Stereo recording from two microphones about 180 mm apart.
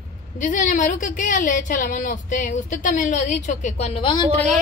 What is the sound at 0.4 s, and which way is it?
A woman's voice, 45° left (ahead or behind).